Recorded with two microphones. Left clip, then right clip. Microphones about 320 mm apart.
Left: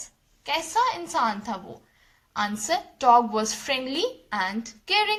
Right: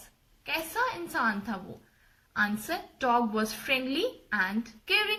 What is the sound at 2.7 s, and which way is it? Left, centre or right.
A woman's voice, centre.